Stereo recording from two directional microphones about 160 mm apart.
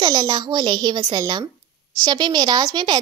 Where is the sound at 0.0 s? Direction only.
25° right (ahead or behind).